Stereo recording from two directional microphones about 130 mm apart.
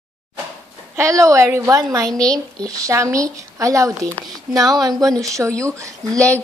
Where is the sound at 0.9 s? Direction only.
25° right (ahead or behind).